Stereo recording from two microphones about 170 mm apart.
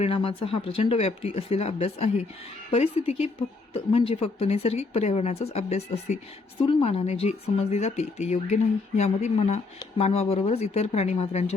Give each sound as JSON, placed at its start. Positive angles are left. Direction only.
{"t": 0.0, "sound": "a woman's voice", "side_deg": 30}